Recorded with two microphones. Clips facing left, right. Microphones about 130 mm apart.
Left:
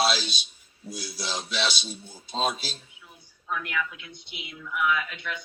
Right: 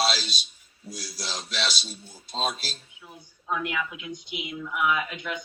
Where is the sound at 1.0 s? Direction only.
55° left (ahead or behind).